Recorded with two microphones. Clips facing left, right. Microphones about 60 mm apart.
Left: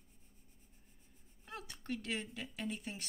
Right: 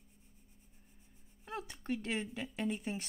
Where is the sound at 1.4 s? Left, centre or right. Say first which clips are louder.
Right 5 dB; centre.